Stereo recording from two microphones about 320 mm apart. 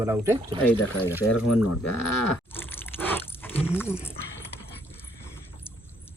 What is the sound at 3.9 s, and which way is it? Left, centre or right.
Speech, centre.